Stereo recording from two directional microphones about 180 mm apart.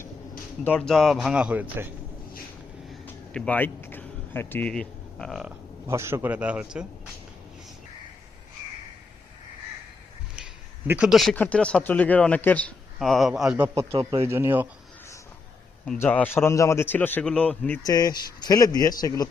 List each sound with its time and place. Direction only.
0.6 s speech: 5° left (ahead or behind); by 1.9 s 10° right (ahead or behind)
3.3 s speech: 5° left (ahead or behind)
5.9 s a man's voice: 15° right (ahead or behind)
10.3 s speech: 5° right (ahead or behind)
13.7 s a man's voice: 30° right (ahead or behind)
14.3 s a man's voice: 15° right (ahead or behind)
16.0 s a man's voice: 10° left (ahead or behind)
17.8 s speech: 20° left (ahead or behind)